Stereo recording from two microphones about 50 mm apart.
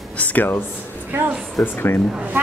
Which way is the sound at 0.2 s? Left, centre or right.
Left.